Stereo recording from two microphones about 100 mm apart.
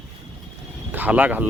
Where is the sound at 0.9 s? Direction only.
20° right (ahead or behind).